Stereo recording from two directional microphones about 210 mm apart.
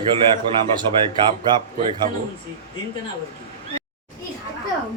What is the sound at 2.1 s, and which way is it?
Speech, 40° right (ahead or behind).